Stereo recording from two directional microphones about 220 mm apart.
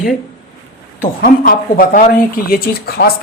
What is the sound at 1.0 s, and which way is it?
Speech, 40° left (ahead or behind).